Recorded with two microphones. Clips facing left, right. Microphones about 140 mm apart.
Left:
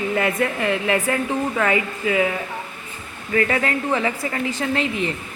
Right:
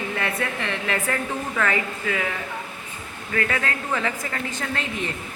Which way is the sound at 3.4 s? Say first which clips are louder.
Left 5 dB; 25° left (ahead or behind).